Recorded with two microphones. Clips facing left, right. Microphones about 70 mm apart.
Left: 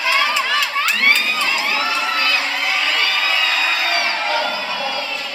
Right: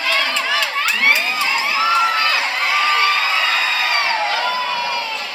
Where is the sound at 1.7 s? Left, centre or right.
Right.